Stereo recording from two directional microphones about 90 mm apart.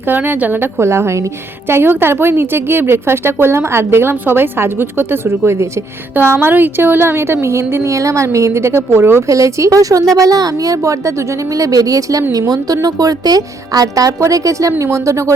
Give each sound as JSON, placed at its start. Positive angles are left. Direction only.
{"t": 0.1, "sound": "a woman's voice", "side_deg": -20}